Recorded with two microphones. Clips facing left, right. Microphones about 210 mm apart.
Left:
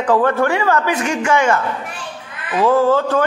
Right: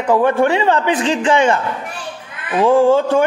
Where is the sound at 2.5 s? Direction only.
15° right (ahead or behind).